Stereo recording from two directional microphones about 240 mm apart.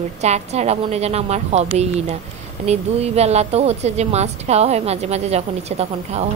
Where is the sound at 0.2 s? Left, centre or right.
Right.